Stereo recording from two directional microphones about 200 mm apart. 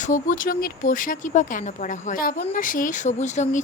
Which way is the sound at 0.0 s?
40° left (ahead or behind).